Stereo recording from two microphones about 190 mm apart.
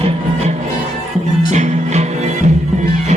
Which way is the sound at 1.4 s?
35° right (ahead or behind).